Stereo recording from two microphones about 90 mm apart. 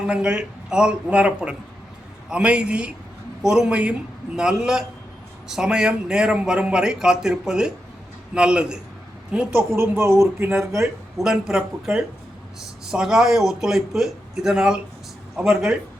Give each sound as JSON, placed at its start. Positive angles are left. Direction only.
{"t": 0.1, "sound": "a man's voice", "side_deg": -10}
{"t": 9.5, "sound": "speech", "side_deg": -25}
{"t": 11.2, "sound": "a man's voice", "side_deg": -5}